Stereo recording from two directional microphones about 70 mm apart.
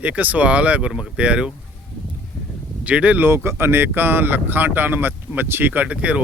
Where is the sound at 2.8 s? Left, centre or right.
Right.